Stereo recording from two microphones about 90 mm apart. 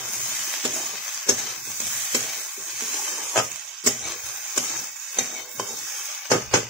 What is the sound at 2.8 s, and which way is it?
Water, centre (ahead or behind).